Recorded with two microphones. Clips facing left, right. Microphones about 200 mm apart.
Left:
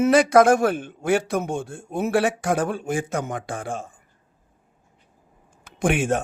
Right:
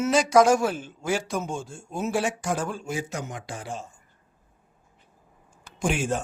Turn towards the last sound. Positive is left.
turn(degrees=60)  # may be behind; listen again after turning